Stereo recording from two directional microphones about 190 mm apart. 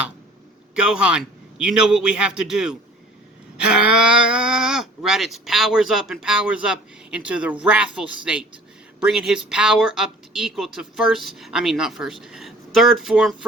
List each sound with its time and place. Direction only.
0.8 s speech: 5° right (ahead or behind)